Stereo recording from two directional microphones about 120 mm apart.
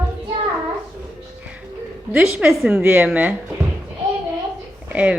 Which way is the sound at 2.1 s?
5° right (ahead or behind).